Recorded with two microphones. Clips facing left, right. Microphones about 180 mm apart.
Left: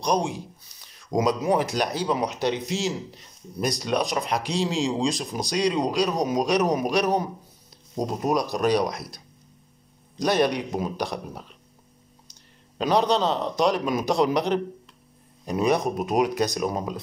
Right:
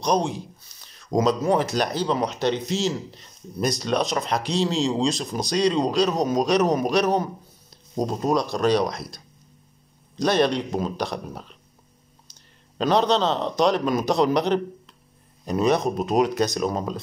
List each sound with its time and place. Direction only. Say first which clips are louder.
0.0 s speech: right 2 dB; 5° left (ahead or behind)
4.2 s a man's voice: right 1 dB; centre (ahead or behind)
4.6 s speech: right 3 dB; 10° left (ahead or behind)
8.2 s speech: right 1 dB; 15° left (ahead or behind)
10.2 s speech: right 1 dB; 10° left (ahead or behind)
12.7 s a man's voice: right 1 dB; 10° left (ahead or behind)